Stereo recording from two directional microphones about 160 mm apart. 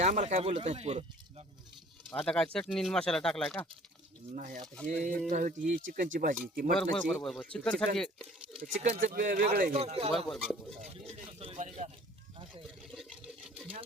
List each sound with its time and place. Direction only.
0.0 s speech: 50° right (ahead or behind)
2.0 s speech: 5° left (ahead or behind)
4.4 s speech: 55° right (ahead or behind)
4.6 s speech: 5° left (ahead or behind)
5.3 s speech: 55° right (ahead or behind)
6.7 s speech: 5° left (ahead or behind)
8.6 s speech: 55° right (ahead or behind)
9.7 s speech: 40° right (ahead or behind)
10.1 s speech: centre (ahead or behind)
11.1 s speech: 40° right (ahead or behind)
12.8 s water: centre (ahead or behind)